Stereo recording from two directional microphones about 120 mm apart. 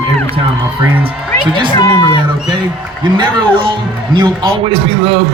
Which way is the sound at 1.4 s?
40° right (ahead or behind).